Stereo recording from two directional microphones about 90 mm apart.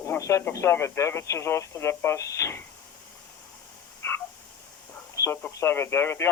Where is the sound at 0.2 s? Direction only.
35° left (ahead or behind).